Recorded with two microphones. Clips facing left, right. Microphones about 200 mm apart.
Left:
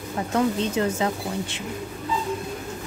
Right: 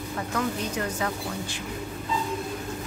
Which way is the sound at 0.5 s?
25° left (ahead or behind).